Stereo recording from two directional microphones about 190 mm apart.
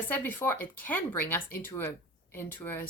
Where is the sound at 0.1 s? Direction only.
10° left (ahead or behind).